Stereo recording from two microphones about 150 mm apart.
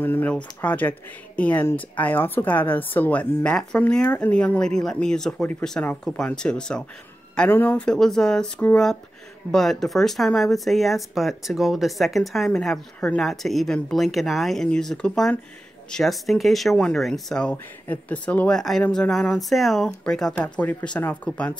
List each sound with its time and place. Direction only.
0.0 s speech: 10° left (ahead or behind)